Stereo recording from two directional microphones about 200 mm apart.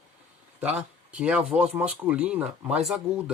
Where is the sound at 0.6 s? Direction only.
5° right (ahead or behind).